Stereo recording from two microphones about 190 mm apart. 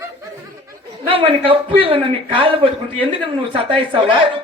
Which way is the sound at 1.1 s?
30° right (ahead or behind).